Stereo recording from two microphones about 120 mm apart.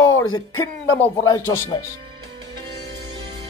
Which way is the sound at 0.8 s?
15° left (ahead or behind).